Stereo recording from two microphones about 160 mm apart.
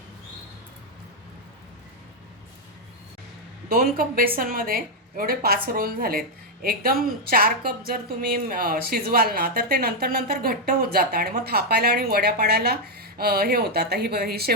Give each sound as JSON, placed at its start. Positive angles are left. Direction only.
{"t": 3.7, "sound": "a woman's voice", "side_deg": -65}